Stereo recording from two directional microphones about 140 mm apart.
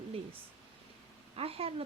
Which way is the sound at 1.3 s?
45° right (ahead or behind).